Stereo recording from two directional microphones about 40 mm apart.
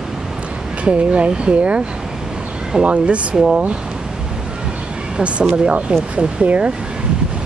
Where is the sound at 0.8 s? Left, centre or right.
Right.